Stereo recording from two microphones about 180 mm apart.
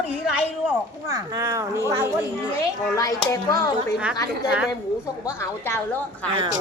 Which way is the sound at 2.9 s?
20° left (ahead or behind).